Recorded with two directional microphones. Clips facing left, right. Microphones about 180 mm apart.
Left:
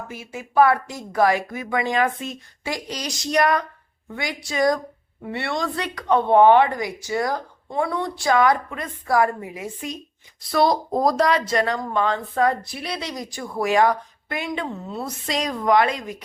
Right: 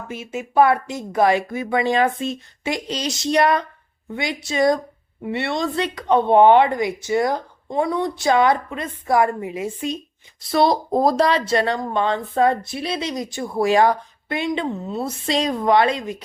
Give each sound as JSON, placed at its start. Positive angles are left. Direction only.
{"t": 0.1, "sound": "speech", "side_deg": -25}